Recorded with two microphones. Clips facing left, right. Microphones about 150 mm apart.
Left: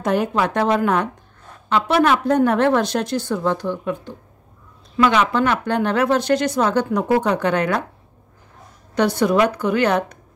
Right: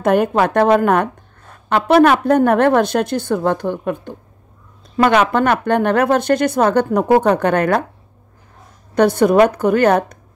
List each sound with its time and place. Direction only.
0.0 s a woman's voice: 55° right (ahead or behind)
8.9 s speech: 50° right (ahead or behind)